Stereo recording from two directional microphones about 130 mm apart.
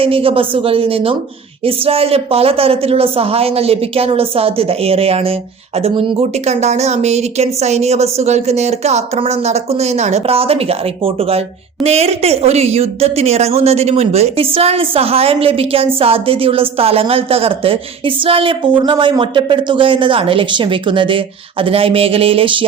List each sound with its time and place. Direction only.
0.0 s a woman's voice: 45° right (ahead or behind)